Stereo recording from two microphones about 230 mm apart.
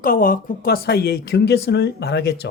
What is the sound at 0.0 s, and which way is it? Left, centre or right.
Speech, left.